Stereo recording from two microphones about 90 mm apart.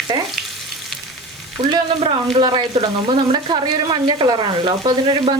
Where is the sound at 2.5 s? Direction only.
60° right (ahead or behind).